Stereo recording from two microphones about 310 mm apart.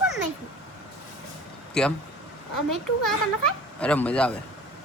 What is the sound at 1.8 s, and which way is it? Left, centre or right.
Speech, centre.